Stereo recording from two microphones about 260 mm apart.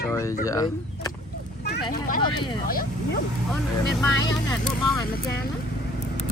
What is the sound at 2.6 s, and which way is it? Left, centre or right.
Speech, left.